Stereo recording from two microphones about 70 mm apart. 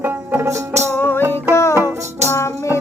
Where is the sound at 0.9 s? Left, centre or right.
Left.